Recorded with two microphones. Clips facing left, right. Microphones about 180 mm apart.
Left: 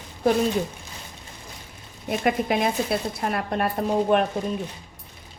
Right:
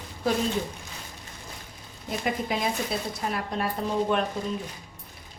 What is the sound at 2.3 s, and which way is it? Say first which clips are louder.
Speech: left 5 dB; 60° left (ahead or behind).